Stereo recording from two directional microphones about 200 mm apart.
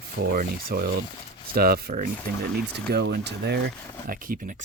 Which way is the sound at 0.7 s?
50° right (ahead or behind).